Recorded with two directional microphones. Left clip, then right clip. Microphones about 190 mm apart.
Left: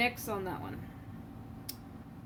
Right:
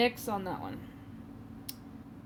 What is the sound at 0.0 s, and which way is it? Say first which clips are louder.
Speech: right 2 dB; 40° right (ahead or behind).